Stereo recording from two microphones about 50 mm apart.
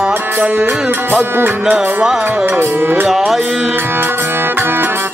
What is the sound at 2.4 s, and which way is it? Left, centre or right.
Music, right.